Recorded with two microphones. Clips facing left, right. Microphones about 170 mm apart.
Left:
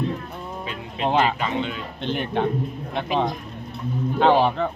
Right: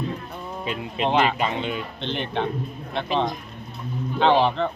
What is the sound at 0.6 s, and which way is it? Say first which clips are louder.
Speech: right 1 dB; 20° right (ahead or behind).